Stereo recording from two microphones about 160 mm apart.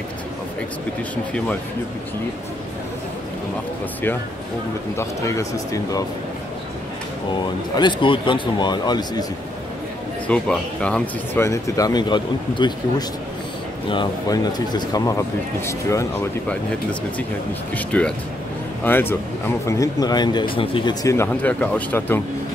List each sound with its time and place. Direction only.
4.9 s speech: 20° left (ahead or behind)
7.7 s speech: 30° left (ahead or behind)
10.2 s speech: 5° left (ahead or behind)
11.4 s speech: 20° left (ahead or behind)
13.8 s speech: 30° left (ahead or behind)
17.7 s speech: 10° left (ahead or behind); by 20.9 s 35° left (ahead or behind)
21.0 s speech: 15° left (ahead or behind)